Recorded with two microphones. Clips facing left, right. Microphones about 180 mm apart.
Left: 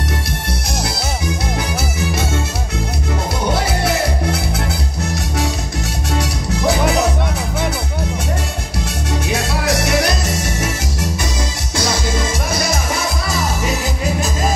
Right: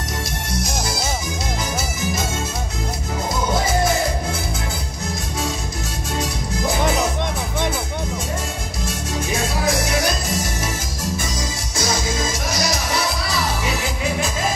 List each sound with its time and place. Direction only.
3.5 s music: 70° left (ahead or behind)
6.1 s music: 70° left (ahead or behind)
9.3 s music: 70° left (ahead or behind)
12.3 s music: 55° left (ahead or behind)